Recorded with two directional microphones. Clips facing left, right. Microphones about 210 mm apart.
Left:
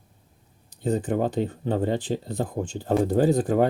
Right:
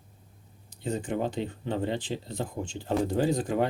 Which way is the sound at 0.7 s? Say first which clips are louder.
Left 6 dB; 40° left (ahead or behind).